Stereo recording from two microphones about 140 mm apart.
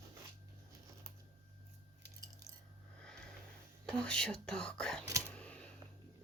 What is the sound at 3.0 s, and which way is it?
Sniff, 5° left (ahead or behind).